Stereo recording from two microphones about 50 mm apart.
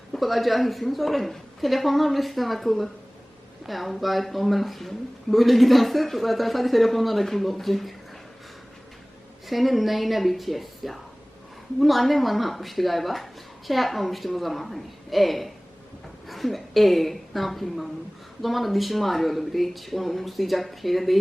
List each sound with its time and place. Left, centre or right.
0.1 s speech: centre
9.5 s speech: centre